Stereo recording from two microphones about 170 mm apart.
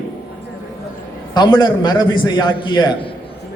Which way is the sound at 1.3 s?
25° left (ahead or behind).